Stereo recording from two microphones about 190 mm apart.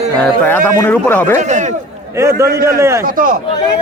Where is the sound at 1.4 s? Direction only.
40° right (ahead or behind).